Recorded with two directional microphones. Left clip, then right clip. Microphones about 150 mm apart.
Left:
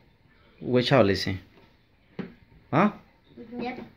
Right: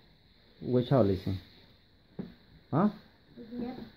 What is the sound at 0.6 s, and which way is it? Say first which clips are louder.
Speech: left 6 dB; 25° left (ahead or behind).